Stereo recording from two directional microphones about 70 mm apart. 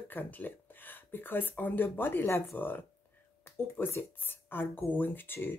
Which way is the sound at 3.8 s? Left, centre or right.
Left.